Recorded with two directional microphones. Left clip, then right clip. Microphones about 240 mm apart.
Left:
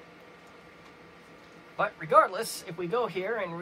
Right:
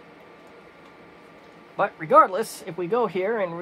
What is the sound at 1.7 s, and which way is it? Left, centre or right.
A man's voice, right.